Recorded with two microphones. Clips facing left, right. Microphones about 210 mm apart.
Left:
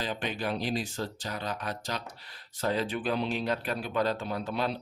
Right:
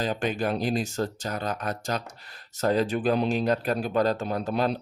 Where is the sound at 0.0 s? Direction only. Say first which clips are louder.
Right 6 dB; 45° right (ahead or behind).